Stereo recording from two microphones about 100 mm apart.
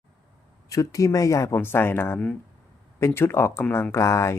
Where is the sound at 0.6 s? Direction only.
35° left (ahead or behind).